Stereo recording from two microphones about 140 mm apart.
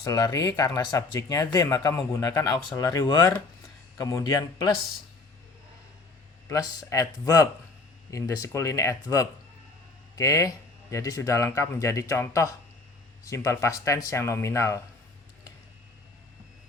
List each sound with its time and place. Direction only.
0.0 s speech: 25° left (ahead or behind)
6.5 s speech: 25° left (ahead or behind)